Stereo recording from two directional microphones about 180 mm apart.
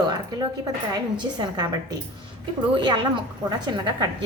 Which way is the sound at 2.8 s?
25° right (ahead or behind).